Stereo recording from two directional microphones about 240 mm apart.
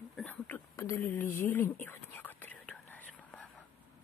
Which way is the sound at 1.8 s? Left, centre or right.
Centre.